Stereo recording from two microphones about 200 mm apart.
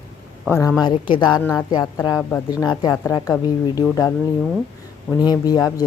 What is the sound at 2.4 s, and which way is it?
Speech, 20° left (ahead or behind).